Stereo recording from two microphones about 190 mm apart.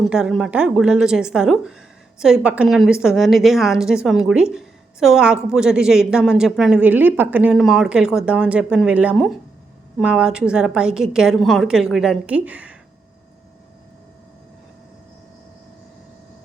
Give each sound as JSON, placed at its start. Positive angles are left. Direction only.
{"t": 0.0, "sound": "a woman's voice", "side_deg": -5}